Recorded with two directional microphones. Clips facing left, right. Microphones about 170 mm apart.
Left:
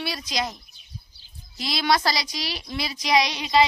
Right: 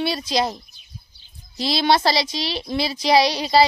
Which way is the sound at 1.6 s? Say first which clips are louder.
Right 4 dB; 30° right (ahead or behind).